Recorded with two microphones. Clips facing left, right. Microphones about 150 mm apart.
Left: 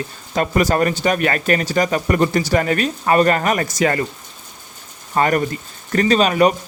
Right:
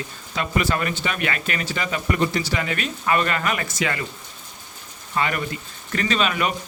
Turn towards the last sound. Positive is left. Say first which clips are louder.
# left 8 dB
turn(degrees=40)  # may be behind; listen again after turning